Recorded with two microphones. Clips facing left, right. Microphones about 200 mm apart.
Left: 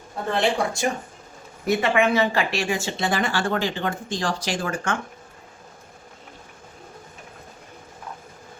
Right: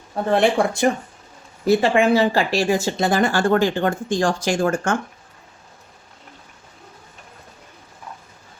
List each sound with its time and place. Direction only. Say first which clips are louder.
0.3 s speech: right 5 dB; 55° right (ahead or behind)
1.6 s speech: right 4 dB; 30° right (ahead or behind)